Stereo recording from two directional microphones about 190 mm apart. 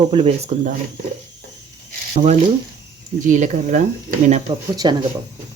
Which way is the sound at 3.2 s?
40° right (ahead or behind).